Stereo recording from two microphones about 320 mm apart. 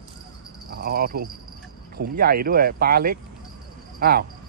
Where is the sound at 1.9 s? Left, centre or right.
Right.